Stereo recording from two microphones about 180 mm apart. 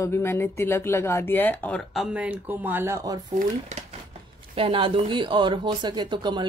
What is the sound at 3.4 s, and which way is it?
Speech, 40° right (ahead or behind).